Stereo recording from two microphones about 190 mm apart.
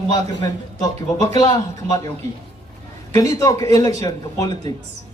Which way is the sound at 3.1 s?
20° left (ahead or behind).